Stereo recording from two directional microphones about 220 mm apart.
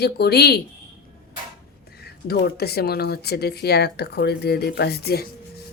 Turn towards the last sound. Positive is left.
turn(degrees=45)  # may be behind; listen again after turning